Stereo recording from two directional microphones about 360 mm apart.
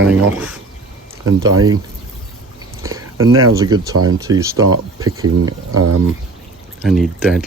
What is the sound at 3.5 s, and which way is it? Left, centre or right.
Speech, centre.